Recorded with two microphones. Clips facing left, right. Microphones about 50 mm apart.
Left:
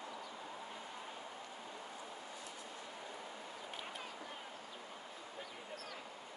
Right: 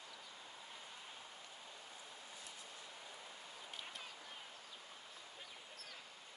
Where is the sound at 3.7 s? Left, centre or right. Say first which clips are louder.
Left 3 dB; centre.